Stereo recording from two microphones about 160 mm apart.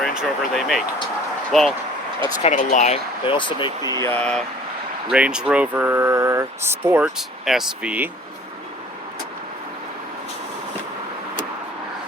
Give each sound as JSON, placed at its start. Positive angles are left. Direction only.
{"t": 0.0, "sound": "speech", "side_deg": 0}
{"t": 2.4, "sound": "speech", "side_deg": 50}
{"t": 3.2, "sound": "speech", "side_deg": 30}
{"t": 5.1, "sound": "speech", "side_deg": -5}
{"t": 7.0, "sound": "speech", "side_deg": 0}